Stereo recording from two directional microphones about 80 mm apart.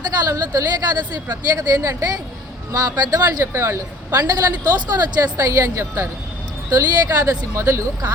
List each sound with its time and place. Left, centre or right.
0.3 s a woman's voice: right
3.5 s a woman's voice: right
4.1 s a woman's voice: right
6.7 s a woman's voice: right